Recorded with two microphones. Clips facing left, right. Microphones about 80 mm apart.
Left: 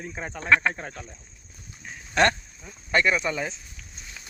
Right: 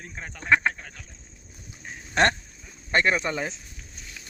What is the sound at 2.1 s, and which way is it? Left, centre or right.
Speech, right.